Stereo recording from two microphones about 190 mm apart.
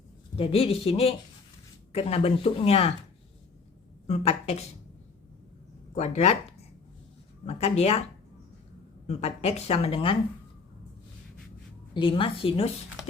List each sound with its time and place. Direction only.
0.3 s speech: 30° left (ahead or behind)
4.0 s a woman's voice: 35° left (ahead or behind)
5.9 s speech: 35° left (ahead or behind)
7.4 s speech: 30° left (ahead or behind)
9.0 s speech: 35° left (ahead or behind)
11.9 s a woman's voice: 25° left (ahead or behind)